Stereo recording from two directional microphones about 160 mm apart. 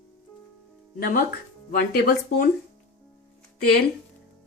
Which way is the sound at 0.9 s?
65° left (ahead or behind).